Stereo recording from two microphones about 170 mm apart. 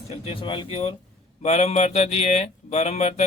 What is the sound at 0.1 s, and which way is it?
Speech, 30° left (ahead or behind).